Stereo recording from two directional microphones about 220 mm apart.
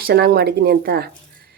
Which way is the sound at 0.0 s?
45° right (ahead or behind).